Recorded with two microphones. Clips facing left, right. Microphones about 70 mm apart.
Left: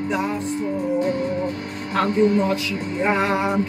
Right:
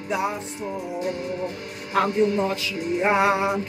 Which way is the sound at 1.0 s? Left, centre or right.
Left.